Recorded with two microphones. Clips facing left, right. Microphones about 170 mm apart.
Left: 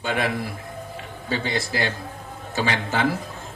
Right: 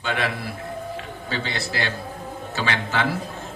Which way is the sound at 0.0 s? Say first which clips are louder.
Left 1 dB; 40° left (ahead or behind).